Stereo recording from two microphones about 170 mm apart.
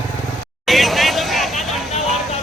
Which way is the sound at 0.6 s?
Centre (ahead or behind).